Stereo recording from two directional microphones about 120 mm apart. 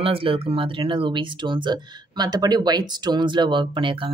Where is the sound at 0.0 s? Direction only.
50° right (ahead or behind).